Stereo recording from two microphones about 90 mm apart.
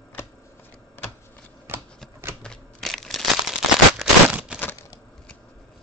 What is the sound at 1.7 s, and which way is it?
Typewriter, 25° right (ahead or behind).